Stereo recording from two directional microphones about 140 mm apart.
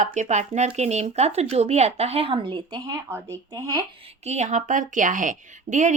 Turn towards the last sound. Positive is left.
turn(degrees=-60)  # may be behind; listen again after turning